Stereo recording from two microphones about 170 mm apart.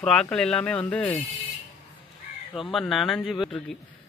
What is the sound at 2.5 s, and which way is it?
Speech, centre (ahead or behind).